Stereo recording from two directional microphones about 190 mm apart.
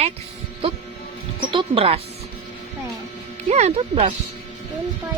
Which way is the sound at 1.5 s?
30° right (ahead or behind).